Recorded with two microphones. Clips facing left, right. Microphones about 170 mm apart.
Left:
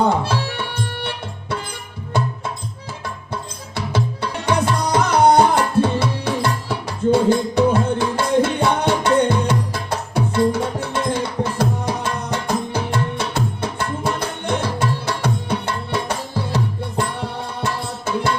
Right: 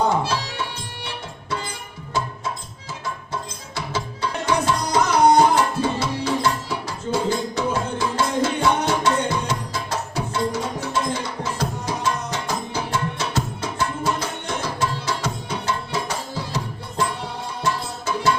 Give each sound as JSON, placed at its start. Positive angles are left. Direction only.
{"t": 0.3, "sound": "music", "side_deg": 60}
{"t": 3.9, "sound": "tabla", "side_deg": 60}
{"t": 11.4, "sound": "music", "side_deg": 60}